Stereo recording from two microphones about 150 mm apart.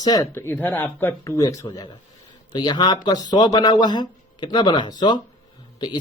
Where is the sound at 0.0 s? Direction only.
25° left (ahead or behind).